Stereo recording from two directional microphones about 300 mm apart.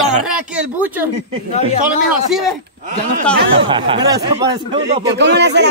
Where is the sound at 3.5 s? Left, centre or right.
Centre.